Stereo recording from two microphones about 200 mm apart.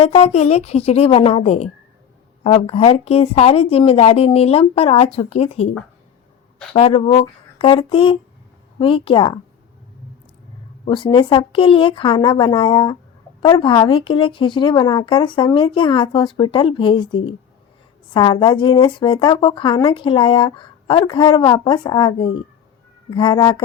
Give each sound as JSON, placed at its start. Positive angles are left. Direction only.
{"t": 0.0, "sound": "speech", "side_deg": 30}
{"t": 6.7, "sound": "speech", "side_deg": 30}
{"t": 10.8, "sound": "speech", "side_deg": 25}